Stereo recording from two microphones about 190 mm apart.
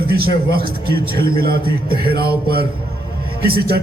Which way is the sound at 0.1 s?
55° right (ahead or behind).